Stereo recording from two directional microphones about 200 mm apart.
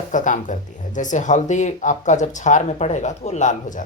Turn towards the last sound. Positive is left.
turn(degrees=35)  # may be behind; listen again after turning